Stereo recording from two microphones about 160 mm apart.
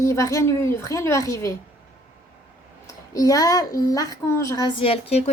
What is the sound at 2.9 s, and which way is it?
Speech, 20° left (ahead or behind).